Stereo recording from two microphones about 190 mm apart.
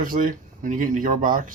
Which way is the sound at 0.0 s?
45° right (ahead or behind).